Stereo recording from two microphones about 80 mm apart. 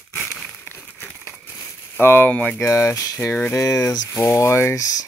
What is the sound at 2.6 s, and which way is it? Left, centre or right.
Speech, left.